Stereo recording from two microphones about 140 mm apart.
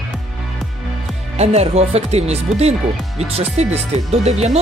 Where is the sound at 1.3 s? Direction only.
50° right (ahead or behind).